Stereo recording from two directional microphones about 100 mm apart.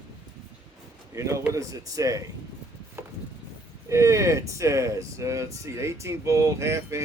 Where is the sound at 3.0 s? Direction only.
25° right (ahead or behind).